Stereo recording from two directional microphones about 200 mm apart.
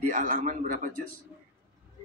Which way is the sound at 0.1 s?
40° right (ahead or behind).